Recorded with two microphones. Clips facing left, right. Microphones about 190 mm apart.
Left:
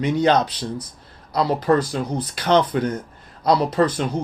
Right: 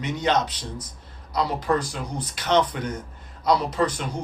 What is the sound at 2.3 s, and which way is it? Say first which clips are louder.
Speech: left 4 dB; 30° left (ahead or behind).